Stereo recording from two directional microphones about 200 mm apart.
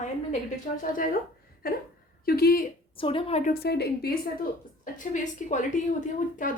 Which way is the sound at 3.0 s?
25° left (ahead or behind).